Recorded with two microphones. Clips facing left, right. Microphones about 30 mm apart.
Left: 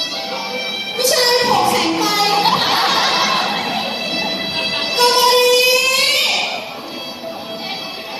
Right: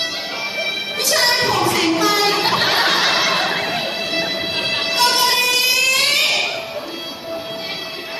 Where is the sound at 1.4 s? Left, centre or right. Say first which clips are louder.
Left 3 dB; centre.